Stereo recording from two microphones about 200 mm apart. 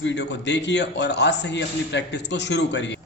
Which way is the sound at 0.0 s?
60° left (ahead or behind).